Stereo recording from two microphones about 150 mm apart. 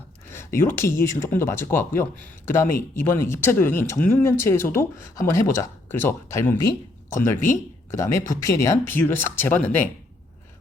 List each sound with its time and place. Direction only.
0.3 s speech: 15° left (ahead or behind)